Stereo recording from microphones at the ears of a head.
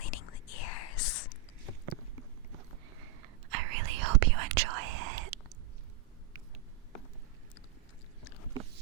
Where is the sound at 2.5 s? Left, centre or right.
Right.